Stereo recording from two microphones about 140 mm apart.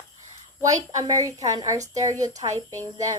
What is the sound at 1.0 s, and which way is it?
Speech, 25° right (ahead or behind).